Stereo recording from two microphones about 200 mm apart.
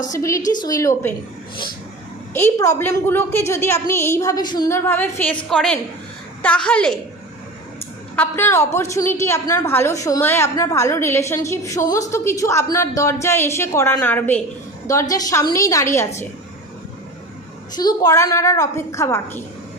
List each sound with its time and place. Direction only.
0.1 s a woman's voice: 15° left (ahead or behind)
2.3 s a woman's voice: 15° left (ahead or behind)
8.1 s a woman's voice: 10° left (ahead or behind)
17.7 s a woman's voice: 20° left (ahead or behind)